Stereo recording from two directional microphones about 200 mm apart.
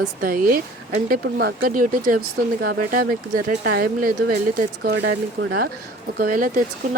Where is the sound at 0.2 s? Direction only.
45° right (ahead or behind).